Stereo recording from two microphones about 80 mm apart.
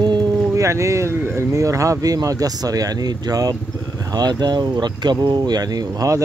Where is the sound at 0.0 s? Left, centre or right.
Right.